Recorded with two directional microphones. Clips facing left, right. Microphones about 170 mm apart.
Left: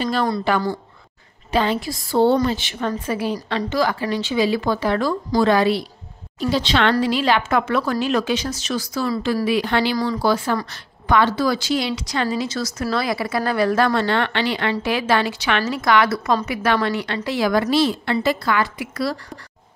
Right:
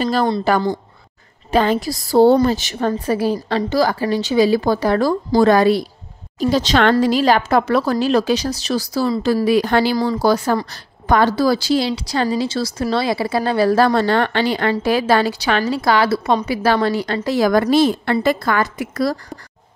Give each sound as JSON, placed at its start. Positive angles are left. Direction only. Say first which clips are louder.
{"t": 0.0, "sound": "speech", "louder": "right 3 dB", "side_deg": -40}
{"t": 1.5, "sound": "a woman's voice", "louder": "right 4 dB", "side_deg": -45}